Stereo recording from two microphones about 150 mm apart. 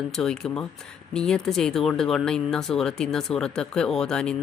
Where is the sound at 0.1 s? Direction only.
5° left (ahead or behind).